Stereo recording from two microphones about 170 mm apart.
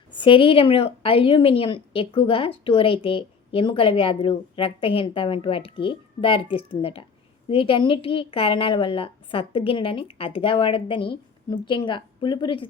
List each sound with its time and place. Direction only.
0.2 s a woman's voice: 30° left (ahead or behind)